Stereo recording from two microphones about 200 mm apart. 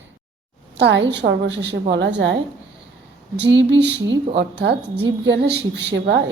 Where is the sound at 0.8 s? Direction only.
60° right (ahead or behind).